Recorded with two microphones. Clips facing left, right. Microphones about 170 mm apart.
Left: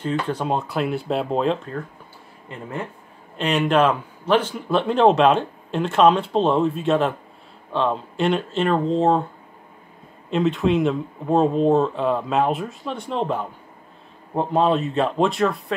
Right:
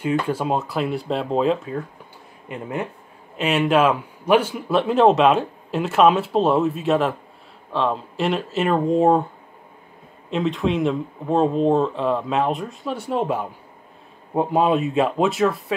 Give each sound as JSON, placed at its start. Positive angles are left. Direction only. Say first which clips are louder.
{"t": 0.3, "sound": "a man's voice", "louder": "right 1 dB", "side_deg": -5}
{"t": 2.4, "sound": "speech", "louder": "right 3 dB", "side_deg": -15}
{"t": 3.3, "sound": "a man's voice", "louder": "right 1 dB", "side_deg": -5}
{"t": 10.3, "sound": "a man's voice", "louder": "left 2 dB", "side_deg": 0}